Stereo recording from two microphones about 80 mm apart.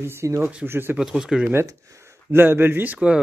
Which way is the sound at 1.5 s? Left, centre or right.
Right.